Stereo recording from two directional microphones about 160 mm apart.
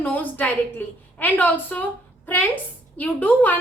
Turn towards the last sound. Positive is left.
turn(degrees=10)  # may be behind; listen again after turning